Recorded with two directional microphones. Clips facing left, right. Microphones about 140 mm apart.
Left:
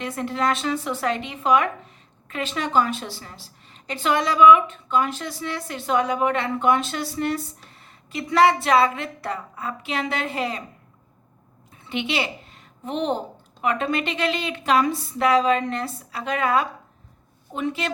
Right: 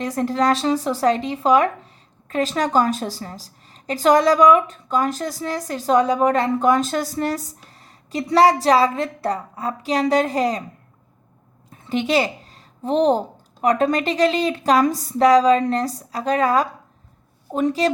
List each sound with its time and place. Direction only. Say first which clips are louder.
0.0 s speech: right 5 dB; 40° right (ahead or behind)
11.9 s a woman's voice: right 7 dB; 40° right (ahead or behind)